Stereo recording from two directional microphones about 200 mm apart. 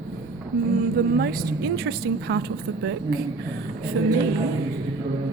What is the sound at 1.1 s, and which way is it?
Speech, 55° right (ahead or behind).